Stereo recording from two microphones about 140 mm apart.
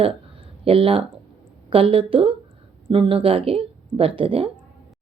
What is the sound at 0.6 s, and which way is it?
Speech, 40° right (ahead or behind).